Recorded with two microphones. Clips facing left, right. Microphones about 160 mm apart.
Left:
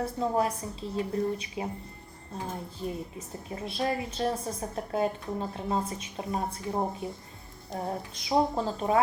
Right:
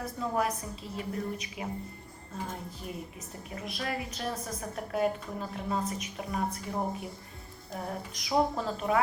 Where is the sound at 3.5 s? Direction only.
30° left (ahead or behind).